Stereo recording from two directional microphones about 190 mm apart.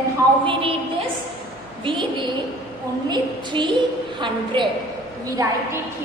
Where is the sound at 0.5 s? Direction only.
30° right (ahead or behind).